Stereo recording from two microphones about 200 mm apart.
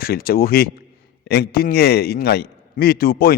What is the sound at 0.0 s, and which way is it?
A man's voice, 50° left (ahead or behind).